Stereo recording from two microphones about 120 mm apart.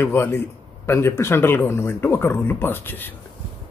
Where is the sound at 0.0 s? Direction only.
20° left (ahead or behind).